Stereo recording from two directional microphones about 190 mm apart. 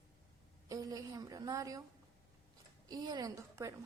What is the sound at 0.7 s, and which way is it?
A woman's voice, 20° right (ahead or behind).